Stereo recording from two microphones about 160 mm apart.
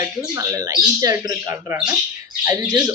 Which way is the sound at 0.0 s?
20° right (ahead or behind).